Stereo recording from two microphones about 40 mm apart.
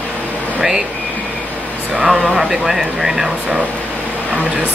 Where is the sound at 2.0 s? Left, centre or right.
Centre.